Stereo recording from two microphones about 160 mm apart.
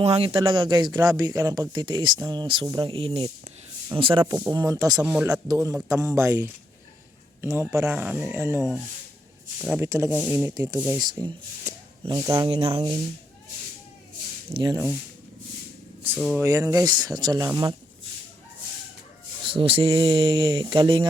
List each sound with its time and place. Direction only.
0.0 s speech: 35° right (ahead or behind)
3.2 s a sound: 20° right (ahead or behind)
3.9 s speech: 35° right (ahead or behind)
4.5 s speech: 20° right (ahead or behind)
5.0 s speech: 10° right (ahead or behind)
5.3 s speech: 20° right (ahead or behind)
10.8 s speech: 5° right (ahead or behind)
11.0 s speech: 25° right (ahead or behind)
12.5 s speech: 35° right (ahead or behind)
14.5 s speech: 25° right (ahead or behind)
16.1 s speech: centre (ahead or behind)
16.4 s speech: 20° right (ahead or behind)
19.5 s speech: 35° right (ahead or behind)